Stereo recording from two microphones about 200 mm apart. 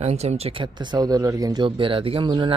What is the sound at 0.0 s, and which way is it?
Speech, 35° right (ahead or behind).